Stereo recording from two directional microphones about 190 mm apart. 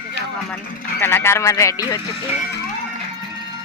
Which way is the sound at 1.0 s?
10° left (ahead or behind).